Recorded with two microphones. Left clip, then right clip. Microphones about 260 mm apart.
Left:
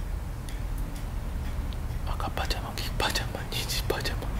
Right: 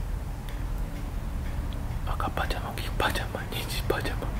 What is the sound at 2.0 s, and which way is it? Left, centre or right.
Speech, centre.